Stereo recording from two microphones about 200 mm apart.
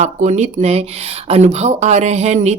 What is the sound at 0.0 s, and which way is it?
A woman's voice, 35° right (ahead or behind).